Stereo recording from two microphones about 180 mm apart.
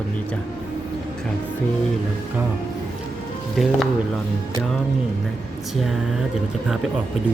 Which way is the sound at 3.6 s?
Centre (ahead or behind).